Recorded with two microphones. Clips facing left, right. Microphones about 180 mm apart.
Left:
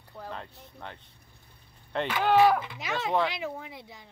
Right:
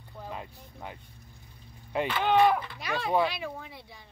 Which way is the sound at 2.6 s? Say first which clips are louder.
Even; 20° left (ahead or behind).